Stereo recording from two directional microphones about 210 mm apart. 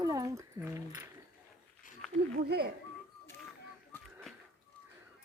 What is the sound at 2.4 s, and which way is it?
Speech, 50° right (ahead or behind).